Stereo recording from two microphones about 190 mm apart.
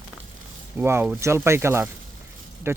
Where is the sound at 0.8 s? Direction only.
10° right (ahead or behind).